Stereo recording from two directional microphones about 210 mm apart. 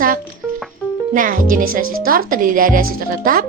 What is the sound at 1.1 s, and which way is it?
Speech, 40° right (ahead or behind).